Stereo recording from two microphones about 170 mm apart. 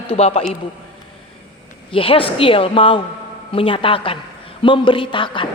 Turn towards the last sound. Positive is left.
turn(degrees=30)  # may be behind; listen again after turning